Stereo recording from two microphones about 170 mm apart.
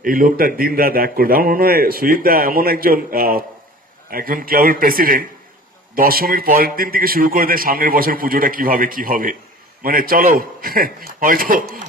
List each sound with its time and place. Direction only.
0.0 s a man's voice: 55° right (ahead or behind)